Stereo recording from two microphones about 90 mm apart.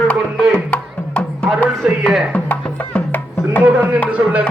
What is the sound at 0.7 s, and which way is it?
Music, 15° left (ahead or behind).